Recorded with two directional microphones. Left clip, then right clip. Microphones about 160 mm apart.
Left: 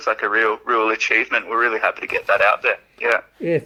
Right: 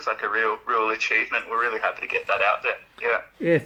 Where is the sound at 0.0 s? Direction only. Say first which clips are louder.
Left 6 dB; 45° left (ahead or behind).